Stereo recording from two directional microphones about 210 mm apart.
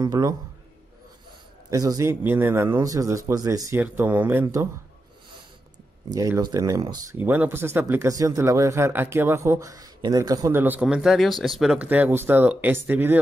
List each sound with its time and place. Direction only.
0.0 s speech: 15° right (ahead or behind)
1.7 s speech: 15° right (ahead or behind)
6.0 s speech: 15° right (ahead or behind)